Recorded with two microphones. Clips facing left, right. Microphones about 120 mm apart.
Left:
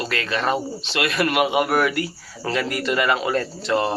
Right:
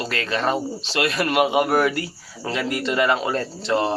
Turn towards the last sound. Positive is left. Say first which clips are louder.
# even
turn(degrees=-25)  # may be behind; listen again after turning